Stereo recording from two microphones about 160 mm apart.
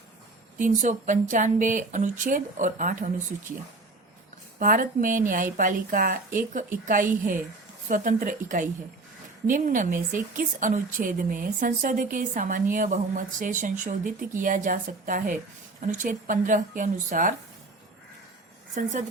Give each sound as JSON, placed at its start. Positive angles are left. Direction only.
{"t": 0.6, "sound": "speech", "side_deg": -55}
{"t": 4.6, "sound": "speech", "side_deg": -55}
{"t": 18.7, "sound": "speech", "side_deg": -50}